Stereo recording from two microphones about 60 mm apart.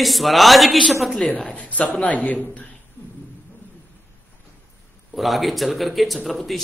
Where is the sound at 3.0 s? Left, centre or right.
Left.